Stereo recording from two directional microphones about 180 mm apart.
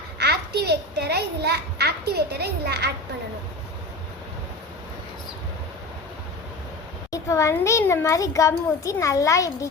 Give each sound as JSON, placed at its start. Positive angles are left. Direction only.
{"t": 0.2, "sound": "a child's voice", "side_deg": -65}
{"t": 7.1, "sound": "a child's voice", "side_deg": 15}